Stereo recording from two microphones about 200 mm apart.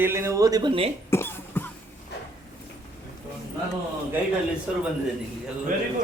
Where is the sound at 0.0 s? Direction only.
15° right (ahead or behind).